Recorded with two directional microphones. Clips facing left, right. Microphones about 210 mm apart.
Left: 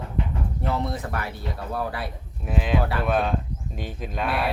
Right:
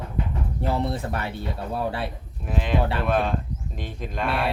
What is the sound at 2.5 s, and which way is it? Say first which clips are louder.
Speech: even; centre (ahead or behind).